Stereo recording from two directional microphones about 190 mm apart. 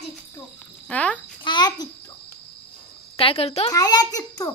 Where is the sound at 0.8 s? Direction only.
5° left (ahead or behind).